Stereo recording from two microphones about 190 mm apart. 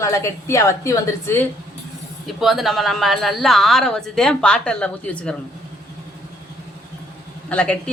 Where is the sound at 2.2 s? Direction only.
Centre (ahead or behind).